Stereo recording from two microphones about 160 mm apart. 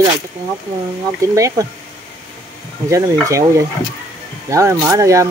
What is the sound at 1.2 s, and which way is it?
Speech, 20° right (ahead or behind).